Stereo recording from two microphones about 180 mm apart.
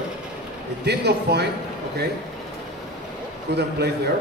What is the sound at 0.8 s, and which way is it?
Speech, 70° right (ahead or behind).